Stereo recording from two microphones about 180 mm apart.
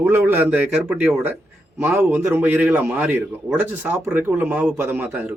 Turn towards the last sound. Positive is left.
turn(degrees=-10)  # may be behind; listen again after turning